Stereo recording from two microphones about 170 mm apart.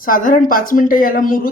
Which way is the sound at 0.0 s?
55° left (ahead or behind).